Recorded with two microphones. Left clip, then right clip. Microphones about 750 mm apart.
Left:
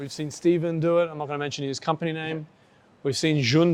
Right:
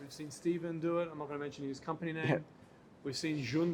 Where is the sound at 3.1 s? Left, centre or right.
Left.